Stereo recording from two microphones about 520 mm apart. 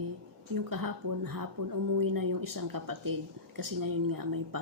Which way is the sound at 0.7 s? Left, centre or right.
Right.